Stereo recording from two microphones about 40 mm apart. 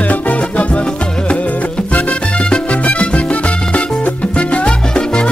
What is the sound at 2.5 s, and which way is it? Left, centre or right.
Music, left.